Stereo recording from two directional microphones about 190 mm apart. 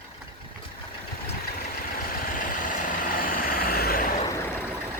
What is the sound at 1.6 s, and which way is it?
Vehicle, 45° left (ahead or behind).